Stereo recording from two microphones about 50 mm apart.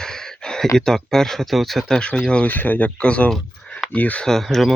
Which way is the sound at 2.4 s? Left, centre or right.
Left.